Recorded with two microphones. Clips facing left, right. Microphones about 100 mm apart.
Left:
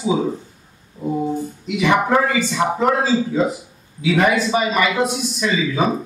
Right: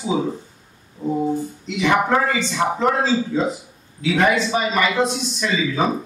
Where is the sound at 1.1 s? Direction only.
10° left (ahead or behind).